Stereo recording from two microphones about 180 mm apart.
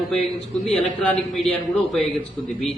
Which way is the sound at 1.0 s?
Centre (ahead or behind).